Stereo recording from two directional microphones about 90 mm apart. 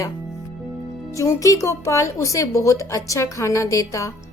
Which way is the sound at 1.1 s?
35° left (ahead or behind).